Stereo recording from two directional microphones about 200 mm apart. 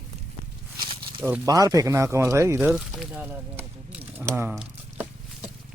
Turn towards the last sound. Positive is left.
turn(degrees=-5)  # may be behind; listen again after turning